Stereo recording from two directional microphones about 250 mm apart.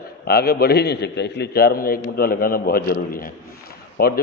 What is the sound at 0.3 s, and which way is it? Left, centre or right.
A man's voice, left.